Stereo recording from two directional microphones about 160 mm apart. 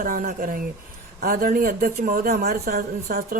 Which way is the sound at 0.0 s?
60° right (ahead or behind).